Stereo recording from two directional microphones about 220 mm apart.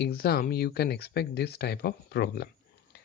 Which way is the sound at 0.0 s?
45° left (ahead or behind).